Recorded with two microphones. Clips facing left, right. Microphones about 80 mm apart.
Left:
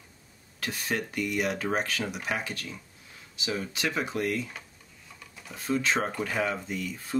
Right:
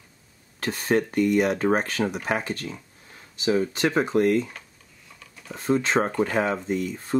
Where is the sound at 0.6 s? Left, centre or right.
Right.